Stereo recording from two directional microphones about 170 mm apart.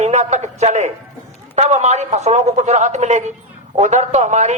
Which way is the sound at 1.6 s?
40° right (ahead or behind).